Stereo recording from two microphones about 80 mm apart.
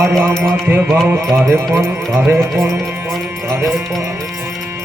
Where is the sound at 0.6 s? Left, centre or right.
Right.